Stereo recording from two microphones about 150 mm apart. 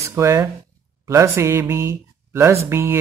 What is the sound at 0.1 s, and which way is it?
Speech, 20° right (ahead or behind).